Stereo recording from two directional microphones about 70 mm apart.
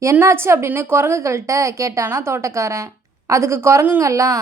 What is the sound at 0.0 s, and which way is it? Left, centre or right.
A woman's voice, right.